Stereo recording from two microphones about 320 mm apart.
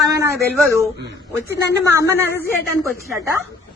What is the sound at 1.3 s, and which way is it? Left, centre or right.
A man's voice, centre.